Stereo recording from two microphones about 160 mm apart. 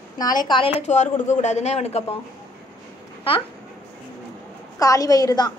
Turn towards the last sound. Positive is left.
turn(degrees=25)  # may be behind; listen again after turning